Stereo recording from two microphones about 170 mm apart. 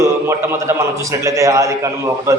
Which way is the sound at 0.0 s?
15° right (ahead or behind).